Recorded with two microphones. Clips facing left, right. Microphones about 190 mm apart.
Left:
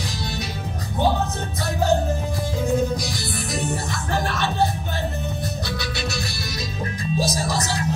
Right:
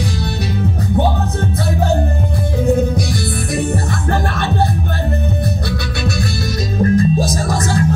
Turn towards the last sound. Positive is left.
turn(degrees=-50)  # may be behind; listen again after turning